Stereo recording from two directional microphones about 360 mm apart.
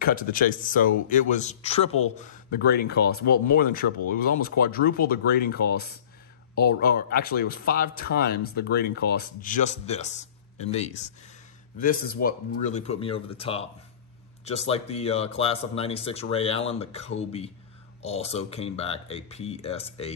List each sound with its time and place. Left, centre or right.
0.0 s speech: left